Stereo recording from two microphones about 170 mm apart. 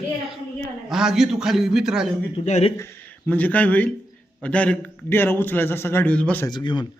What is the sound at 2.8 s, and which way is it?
A man's voice, 15° left (ahead or behind).